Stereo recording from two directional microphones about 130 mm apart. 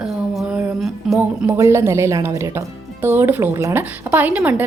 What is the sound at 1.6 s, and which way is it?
A woman's voice, 20° right (ahead or behind).